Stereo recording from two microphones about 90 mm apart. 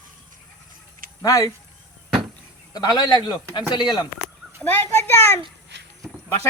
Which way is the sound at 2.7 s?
50° left (ahead or behind).